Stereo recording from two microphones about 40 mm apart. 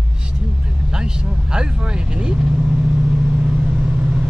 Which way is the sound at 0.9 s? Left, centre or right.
Centre.